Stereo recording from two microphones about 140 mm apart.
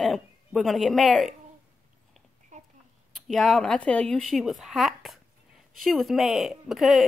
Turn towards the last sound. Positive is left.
turn(degrees=0)  # may be behind; listen again after turning